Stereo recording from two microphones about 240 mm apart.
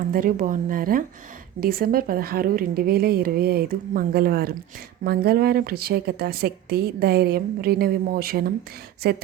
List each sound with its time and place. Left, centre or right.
0.1 s a woman's voice: right